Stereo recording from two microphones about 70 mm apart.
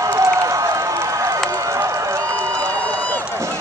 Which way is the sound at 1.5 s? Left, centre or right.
Right.